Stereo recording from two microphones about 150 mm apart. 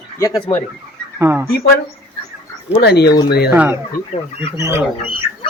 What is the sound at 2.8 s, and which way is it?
Speech, 90° left.